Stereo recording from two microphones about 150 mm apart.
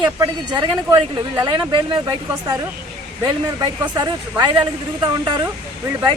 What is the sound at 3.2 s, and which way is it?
Speech, 25° right (ahead or behind).